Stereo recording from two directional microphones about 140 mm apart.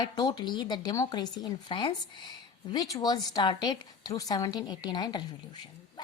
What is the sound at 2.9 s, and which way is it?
Speech, 30° left (ahead or behind).